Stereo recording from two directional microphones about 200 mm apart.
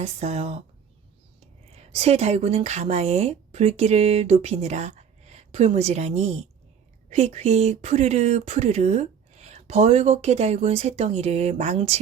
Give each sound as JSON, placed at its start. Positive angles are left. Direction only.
{"t": 0.0, "sound": "speech", "side_deg": -30}
{"t": 1.7, "sound": "speech", "side_deg": -30}